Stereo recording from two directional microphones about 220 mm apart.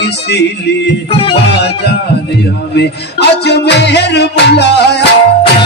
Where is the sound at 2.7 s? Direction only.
50° left (ahead or behind).